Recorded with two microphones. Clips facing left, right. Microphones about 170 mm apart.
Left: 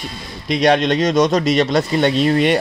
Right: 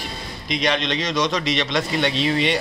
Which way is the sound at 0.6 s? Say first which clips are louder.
Left 9 dB; 45° left (ahead or behind).